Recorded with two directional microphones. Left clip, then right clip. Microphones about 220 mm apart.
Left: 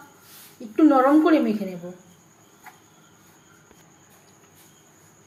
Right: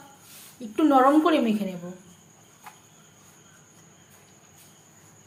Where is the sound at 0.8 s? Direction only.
15° right (ahead or behind).